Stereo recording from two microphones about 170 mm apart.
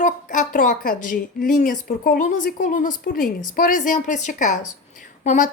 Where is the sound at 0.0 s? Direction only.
50° left (ahead or behind).